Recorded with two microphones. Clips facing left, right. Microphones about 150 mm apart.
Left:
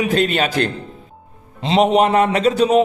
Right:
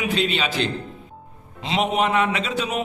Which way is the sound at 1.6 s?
35° left (ahead or behind).